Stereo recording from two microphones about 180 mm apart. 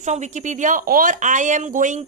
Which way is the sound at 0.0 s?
40° right (ahead or behind).